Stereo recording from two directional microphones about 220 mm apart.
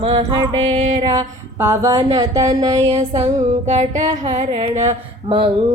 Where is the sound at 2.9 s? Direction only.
25° right (ahead or behind).